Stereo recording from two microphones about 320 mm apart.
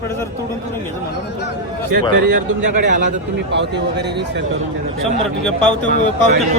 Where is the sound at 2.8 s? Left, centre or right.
Right.